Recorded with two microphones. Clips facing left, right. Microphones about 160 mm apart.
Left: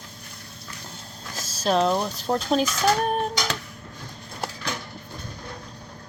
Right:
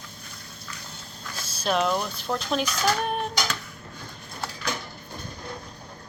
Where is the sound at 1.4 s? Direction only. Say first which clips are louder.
Left 3 dB; 35° left (ahead or behind).